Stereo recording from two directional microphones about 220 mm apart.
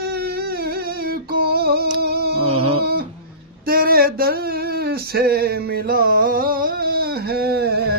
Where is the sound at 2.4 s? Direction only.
25° right (ahead or behind).